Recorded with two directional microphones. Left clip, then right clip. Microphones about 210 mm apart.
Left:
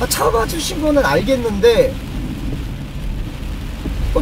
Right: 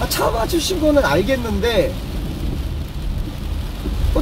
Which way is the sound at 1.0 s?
20° left (ahead or behind).